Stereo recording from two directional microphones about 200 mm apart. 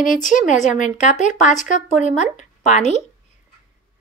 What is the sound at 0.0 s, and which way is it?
A woman's voice, 40° left (ahead or behind).